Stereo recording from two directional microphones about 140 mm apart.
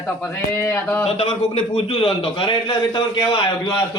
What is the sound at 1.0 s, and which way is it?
A man's voice, 45° left (ahead or behind).